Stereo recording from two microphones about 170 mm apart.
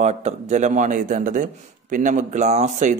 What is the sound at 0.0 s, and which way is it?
Speech, 40° right (ahead or behind).